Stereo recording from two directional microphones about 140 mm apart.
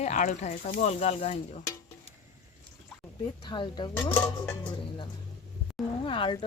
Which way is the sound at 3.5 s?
35° left (ahead or behind).